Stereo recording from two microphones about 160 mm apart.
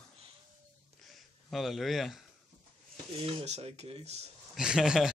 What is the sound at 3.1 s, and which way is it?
Speech, 35° right (ahead or behind).